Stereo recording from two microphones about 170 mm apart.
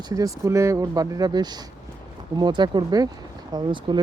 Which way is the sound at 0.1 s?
20° right (ahead or behind).